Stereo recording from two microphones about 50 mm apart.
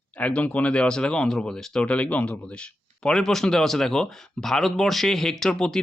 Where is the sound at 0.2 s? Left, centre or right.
Left; by 1.8 s centre.